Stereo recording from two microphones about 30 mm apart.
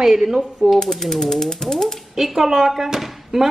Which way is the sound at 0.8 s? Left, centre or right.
Centre.